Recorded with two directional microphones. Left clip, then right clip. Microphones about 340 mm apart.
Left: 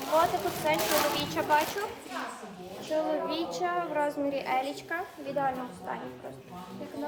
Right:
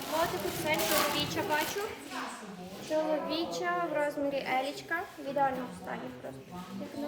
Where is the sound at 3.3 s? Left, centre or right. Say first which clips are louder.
Left 2 dB; centre.